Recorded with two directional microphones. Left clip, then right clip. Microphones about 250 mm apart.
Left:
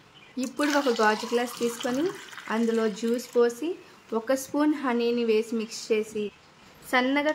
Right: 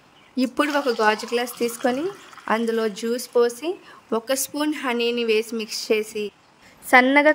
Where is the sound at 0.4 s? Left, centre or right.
Right.